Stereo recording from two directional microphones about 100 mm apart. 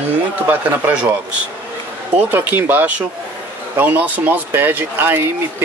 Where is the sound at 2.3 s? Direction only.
20° right (ahead or behind).